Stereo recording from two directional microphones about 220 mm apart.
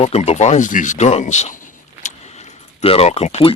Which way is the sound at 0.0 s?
30° left (ahead or behind).